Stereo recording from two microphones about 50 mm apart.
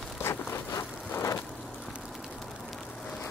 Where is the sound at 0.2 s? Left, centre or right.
Left.